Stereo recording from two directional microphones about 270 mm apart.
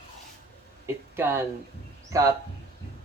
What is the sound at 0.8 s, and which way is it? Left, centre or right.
Speech, centre.